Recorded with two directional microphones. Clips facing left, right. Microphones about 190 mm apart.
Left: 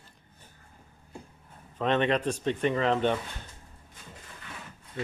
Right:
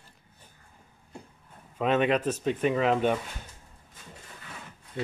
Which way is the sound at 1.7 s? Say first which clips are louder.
Right 1 dB; 5° right (ahead or behind).